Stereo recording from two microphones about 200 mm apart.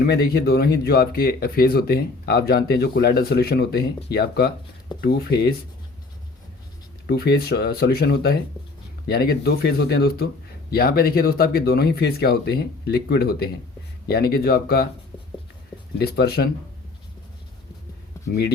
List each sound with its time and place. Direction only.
0.0 s speech: 50° left (ahead or behind)
7.1 s speech: 55° left (ahead or behind)
16.0 s speech: 50° left (ahead or behind)